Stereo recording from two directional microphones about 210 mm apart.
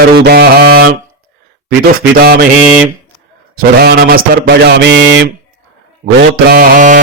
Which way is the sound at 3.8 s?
45° right (ahead or behind).